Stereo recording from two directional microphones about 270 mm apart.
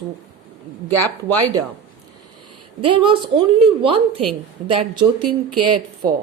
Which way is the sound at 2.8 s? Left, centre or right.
Centre.